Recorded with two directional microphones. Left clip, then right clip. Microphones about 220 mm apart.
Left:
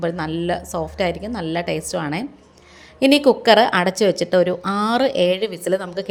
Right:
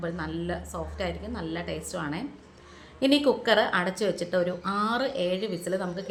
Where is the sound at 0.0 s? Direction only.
30° left (ahead or behind).